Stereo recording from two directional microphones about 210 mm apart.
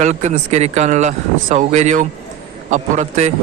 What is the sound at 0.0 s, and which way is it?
A man's voice, 35° right (ahead or behind).